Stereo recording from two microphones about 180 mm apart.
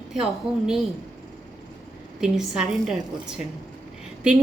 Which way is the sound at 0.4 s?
30° right (ahead or behind).